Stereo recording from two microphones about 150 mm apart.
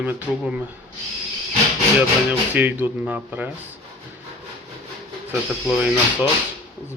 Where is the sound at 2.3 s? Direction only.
10° right (ahead or behind).